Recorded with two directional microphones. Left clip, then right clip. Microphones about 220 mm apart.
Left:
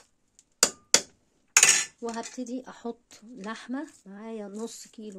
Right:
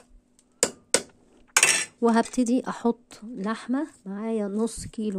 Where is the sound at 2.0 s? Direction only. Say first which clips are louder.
Right 12 dB; 40° right (ahead or behind).